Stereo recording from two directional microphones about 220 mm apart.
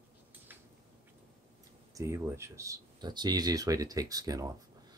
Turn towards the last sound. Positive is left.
turn(degrees=-15)  # may be behind; listen again after turning